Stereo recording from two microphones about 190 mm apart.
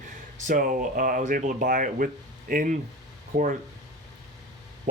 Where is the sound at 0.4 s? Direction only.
45° right (ahead or behind).